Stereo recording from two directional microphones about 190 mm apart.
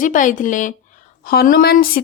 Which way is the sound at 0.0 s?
40° left (ahead or behind).